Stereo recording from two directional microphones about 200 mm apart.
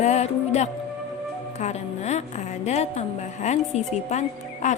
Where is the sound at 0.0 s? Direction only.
35° left (ahead or behind).